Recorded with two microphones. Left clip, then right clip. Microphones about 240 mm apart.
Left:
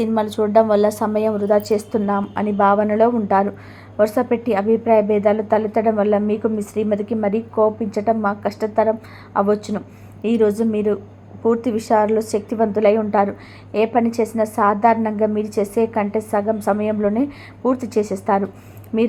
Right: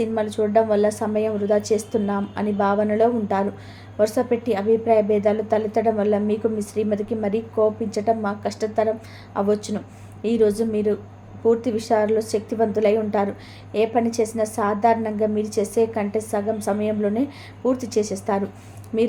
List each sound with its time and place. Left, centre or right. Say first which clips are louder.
0.0 s a woman's voice: left 3 dB; centre
17.7 s a woman's voice: left 2 dB; centre
18.3 s a woman's voice: left 5 dB; centre